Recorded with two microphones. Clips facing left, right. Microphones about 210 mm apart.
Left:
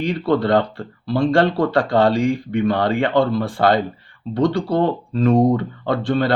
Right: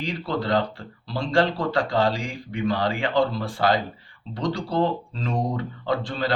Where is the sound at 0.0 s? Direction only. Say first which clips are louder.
Left 9 dB; 60° left (ahead or behind).